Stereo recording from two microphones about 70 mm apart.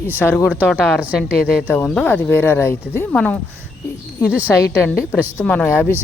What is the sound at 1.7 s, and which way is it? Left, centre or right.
Speech, centre.